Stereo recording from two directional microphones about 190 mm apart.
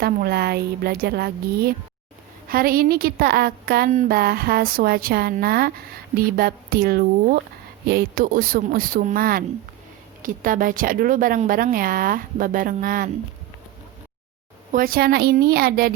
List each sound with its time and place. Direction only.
0.0 s a woman's voice: 55° right (ahead or behind)
14.7 s speech: 50° right (ahead or behind)